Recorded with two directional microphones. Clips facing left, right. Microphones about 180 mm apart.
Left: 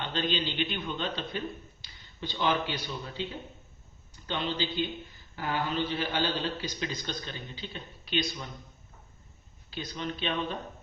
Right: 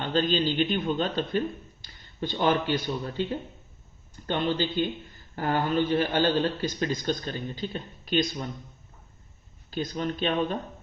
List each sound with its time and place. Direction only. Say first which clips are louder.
0.0 s a man's voice: right 6 dB; 45° right (ahead or behind)
9.6 s a man's voice: right 6 dB; 45° right (ahead or behind)